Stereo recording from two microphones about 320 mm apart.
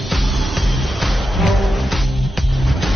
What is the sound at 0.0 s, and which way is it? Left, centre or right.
Music, centre.